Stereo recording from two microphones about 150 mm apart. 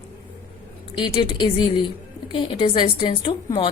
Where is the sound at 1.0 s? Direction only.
30° left (ahead or behind).